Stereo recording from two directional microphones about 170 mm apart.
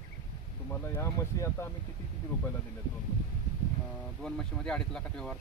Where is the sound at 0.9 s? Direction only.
20° left (ahead or behind).